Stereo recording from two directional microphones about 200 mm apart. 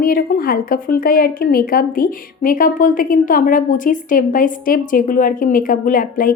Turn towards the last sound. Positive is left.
turn(degrees=45)  # may be behind; listen again after turning